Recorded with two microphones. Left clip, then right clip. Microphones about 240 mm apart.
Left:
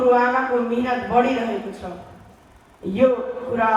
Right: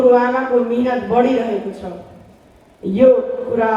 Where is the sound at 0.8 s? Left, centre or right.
Centre.